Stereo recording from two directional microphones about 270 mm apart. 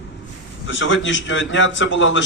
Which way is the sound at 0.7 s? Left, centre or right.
Left.